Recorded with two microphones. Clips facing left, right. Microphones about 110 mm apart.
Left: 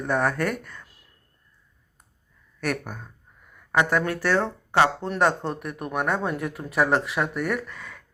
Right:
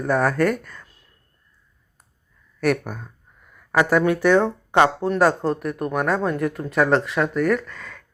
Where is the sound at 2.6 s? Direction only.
10° right (ahead or behind).